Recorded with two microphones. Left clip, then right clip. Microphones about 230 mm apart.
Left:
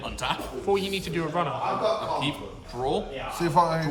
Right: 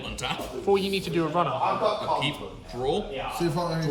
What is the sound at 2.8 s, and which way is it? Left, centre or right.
Speech, left.